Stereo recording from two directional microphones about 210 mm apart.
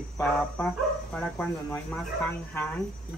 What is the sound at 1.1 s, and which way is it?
Speech, 5° left (ahead or behind).